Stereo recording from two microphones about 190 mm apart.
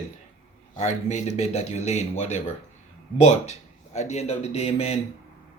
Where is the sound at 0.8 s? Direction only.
40° left (ahead or behind).